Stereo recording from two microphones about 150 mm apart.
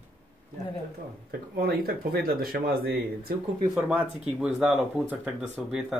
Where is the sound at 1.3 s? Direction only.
90° right.